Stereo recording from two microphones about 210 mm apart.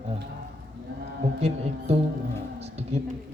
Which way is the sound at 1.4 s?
30° right (ahead or behind).